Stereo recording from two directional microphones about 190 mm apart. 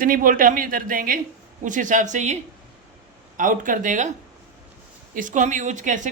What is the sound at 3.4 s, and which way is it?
Speech, 45° right (ahead or behind).